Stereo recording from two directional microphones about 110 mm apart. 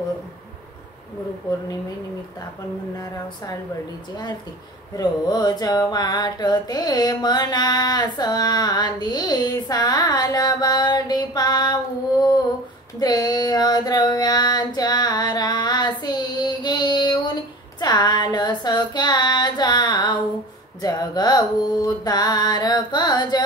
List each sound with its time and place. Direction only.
4.9 s a sound: 40° left (ahead or behind)
13.0 s female singing: 35° left (ahead or behind)
20.8 s mantra: 35° left (ahead or behind)